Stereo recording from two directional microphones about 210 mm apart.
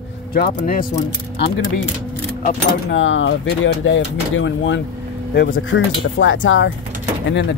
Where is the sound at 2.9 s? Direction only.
65° left (ahead or behind).